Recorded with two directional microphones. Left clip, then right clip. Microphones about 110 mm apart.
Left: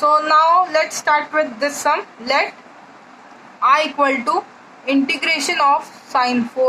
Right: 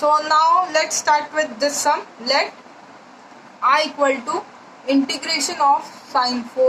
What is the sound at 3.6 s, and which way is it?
A man's voice, 35° left (ahead or behind).